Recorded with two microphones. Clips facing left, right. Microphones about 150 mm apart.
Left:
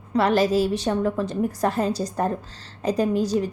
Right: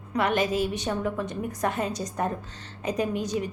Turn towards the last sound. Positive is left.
turn(degrees=35)  # may be behind; listen again after turning